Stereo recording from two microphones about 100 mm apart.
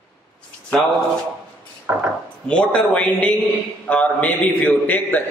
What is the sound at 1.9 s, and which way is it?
Speech, 25° right (ahead or behind).